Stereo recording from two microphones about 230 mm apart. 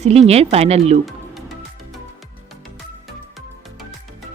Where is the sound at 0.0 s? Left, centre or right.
Right.